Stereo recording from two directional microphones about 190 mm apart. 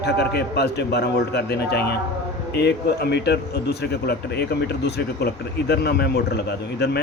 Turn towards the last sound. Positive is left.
turn(degrees=60)  # may be behind; listen again after turning